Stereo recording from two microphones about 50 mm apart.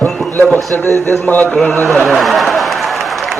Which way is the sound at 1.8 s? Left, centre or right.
Centre.